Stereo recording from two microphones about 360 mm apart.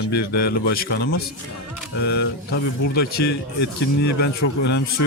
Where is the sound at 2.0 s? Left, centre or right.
Left.